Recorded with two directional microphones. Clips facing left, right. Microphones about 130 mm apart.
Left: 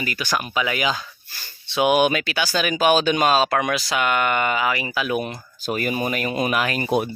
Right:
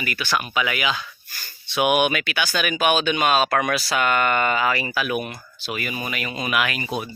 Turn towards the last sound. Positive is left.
turn(degrees=55)  # may be behind; listen again after turning